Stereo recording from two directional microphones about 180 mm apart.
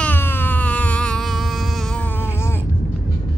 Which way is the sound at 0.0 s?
10° left (ahead or behind).